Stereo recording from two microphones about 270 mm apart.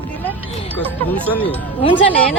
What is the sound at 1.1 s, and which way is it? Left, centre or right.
Speech, centre.